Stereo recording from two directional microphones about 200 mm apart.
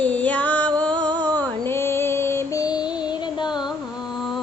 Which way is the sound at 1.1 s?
20° right (ahead or behind).